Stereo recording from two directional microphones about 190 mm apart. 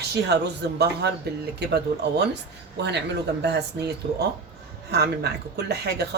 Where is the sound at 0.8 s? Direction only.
60° right (ahead or behind).